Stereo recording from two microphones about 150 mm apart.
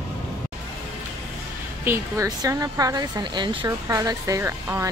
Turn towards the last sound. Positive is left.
turn(degrees=-20)  # may be behind; listen again after turning